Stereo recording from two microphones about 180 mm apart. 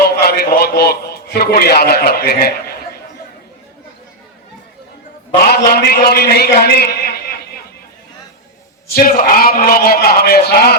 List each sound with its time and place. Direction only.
0.0 s a sound: 60° left (ahead or behind)
5.4 s a man's voice: 60° left (ahead or behind)
9.0 s a man's voice: 55° left (ahead or behind)